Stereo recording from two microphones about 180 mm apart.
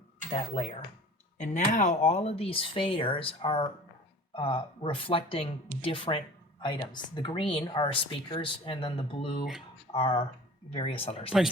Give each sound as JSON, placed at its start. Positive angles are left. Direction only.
{"t": 1.4, "sound": "a woman's voice", "side_deg": 40}